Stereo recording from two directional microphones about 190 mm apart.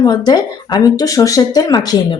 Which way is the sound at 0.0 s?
20° left (ahead or behind).